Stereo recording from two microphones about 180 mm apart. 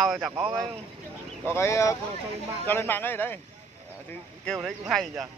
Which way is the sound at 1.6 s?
15° left (ahead or behind).